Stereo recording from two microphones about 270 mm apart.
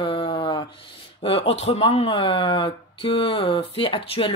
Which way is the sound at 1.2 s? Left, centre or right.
Left.